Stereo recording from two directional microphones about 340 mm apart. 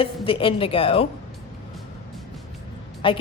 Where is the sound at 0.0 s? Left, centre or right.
Centre.